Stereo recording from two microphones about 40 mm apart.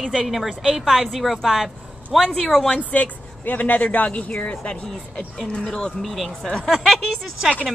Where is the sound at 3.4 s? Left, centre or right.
Left.